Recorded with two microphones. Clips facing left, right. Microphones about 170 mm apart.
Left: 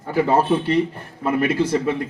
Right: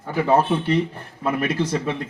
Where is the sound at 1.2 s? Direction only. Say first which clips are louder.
Left 3 dB; 25° left (ahead or behind).